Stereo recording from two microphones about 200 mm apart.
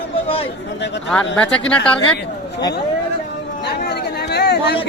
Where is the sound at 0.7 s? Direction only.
60° left (ahead or behind).